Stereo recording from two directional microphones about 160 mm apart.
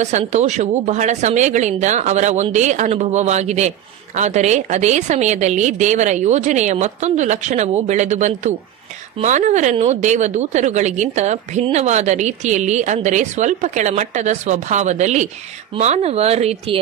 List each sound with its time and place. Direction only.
0.0 s speech: 45° right (ahead or behind)